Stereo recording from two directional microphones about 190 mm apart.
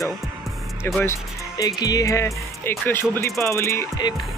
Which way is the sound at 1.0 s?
20° left (ahead or behind).